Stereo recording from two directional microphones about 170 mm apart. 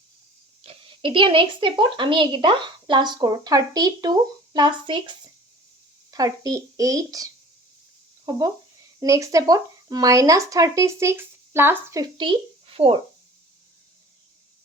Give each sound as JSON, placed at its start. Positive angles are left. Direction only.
{"t": 0.6, "sound": "speech", "side_deg": -30}